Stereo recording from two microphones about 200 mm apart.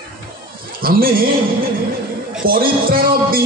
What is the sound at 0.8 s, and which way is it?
Speech, 45° right (ahead or behind).